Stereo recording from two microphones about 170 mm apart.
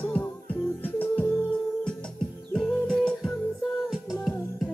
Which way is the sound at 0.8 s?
10° left (ahead or behind).